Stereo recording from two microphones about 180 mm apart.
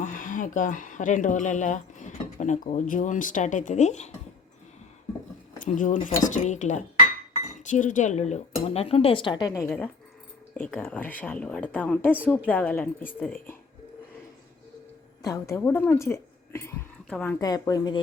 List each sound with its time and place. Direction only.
0.0 s speech: 50° left (ahead or behind)
5.5 s a woman's voice: 45° left (ahead or behind); by 13.1 s 10° left (ahead or behind)
15.2 s a woman's voice: 15° left (ahead or behind)
17.4 s speech: 20° left (ahead or behind)